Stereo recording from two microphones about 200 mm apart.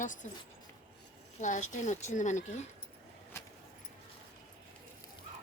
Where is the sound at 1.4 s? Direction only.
40° left (ahead or behind).